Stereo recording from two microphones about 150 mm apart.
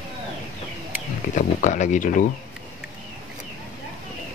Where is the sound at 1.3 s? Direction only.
55° left (ahead or behind).